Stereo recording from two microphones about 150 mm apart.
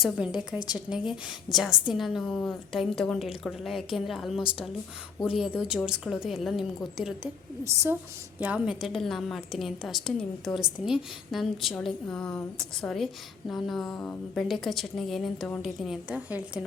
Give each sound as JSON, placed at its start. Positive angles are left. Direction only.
{"t": 0.0, "sound": "a woman's voice", "side_deg": -5}
{"t": 7.6, "sound": "a woman's voice", "side_deg": -20}
{"t": 8.4, "sound": "a woman's voice", "side_deg": -10}